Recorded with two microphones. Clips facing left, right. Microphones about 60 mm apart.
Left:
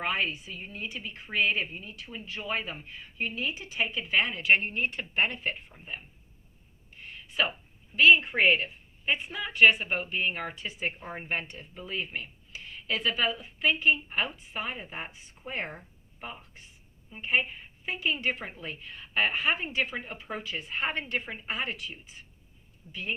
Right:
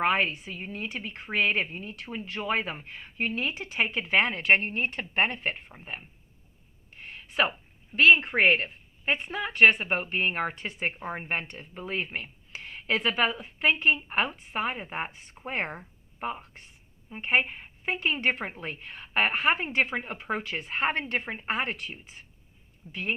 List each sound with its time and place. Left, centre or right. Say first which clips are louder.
0.0 s a woman's voice: right 5 dB; right
7.1 s a sound: right 3 dB; right
7.9 s a woman's voice: right 1 dB; right
21.1 s a woman's voice: right 3 dB; right